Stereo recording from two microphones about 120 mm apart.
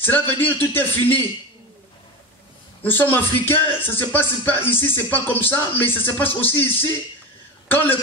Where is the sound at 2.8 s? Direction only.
15° left (ahead or behind).